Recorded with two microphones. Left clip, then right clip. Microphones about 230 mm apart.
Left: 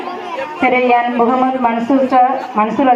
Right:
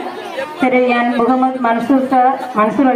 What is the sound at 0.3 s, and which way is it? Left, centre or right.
Speech, right.